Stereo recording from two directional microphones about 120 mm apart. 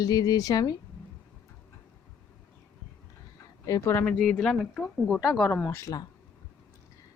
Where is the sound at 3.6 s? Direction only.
25° left (ahead or behind).